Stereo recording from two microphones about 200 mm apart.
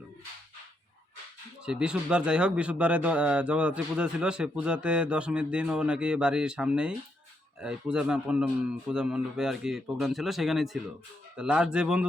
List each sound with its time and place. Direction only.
1.6 s speech: 5° right (ahead or behind)